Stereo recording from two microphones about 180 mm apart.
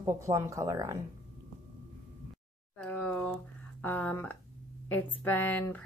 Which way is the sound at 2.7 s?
10° left (ahead or behind).